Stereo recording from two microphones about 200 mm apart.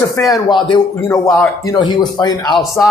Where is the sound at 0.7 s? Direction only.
20° left (ahead or behind).